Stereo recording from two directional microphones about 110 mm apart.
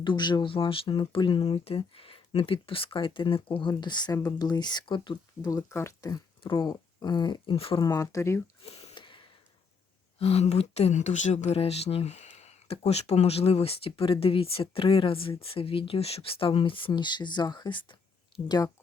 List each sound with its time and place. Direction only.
0.0 s speech: 45° left (ahead or behind)
3.7 s speech: 40° left (ahead or behind)
5.5 s speech: 30° left (ahead or behind)
6.4 s speech: 45° left (ahead or behind)
7.5 s speech: 60° left (ahead or behind)
7.8 s speech: 35° left (ahead or behind)
8.6 s a sound: 70° left (ahead or behind)
9.0 s a sound: 50° left (ahead or behind)
10.2 s speech: 70° left (ahead or behind); by 17.9 s 45° left (ahead or behind)
18.4 s speech: 35° left (ahead or behind)